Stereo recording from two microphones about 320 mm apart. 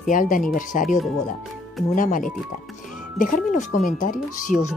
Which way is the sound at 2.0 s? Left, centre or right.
Left.